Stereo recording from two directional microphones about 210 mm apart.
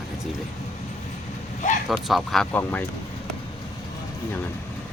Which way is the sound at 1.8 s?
Centre (ahead or behind).